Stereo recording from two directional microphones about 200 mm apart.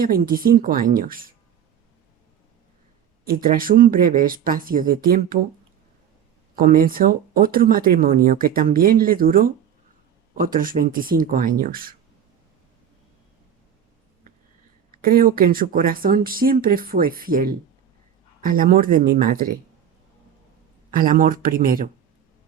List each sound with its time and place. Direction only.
0.0 s speech: 45° right (ahead or behind)
3.2 s speech: 45° right (ahead or behind)
6.6 s speech: 45° right (ahead or behind)
15.0 s speech: 45° right (ahead or behind)
20.9 s speech: 45° right (ahead or behind)